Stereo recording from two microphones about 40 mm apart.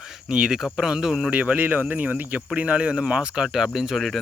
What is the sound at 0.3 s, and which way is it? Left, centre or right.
Speech, centre.